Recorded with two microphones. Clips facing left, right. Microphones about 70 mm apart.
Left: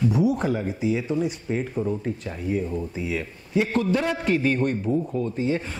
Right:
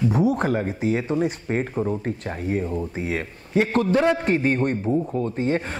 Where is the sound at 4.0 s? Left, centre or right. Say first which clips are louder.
Right 3 dB; right.